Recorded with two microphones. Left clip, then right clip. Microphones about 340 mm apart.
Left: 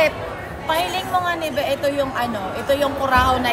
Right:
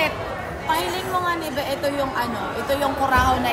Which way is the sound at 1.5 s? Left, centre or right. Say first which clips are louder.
Left 3 dB; left.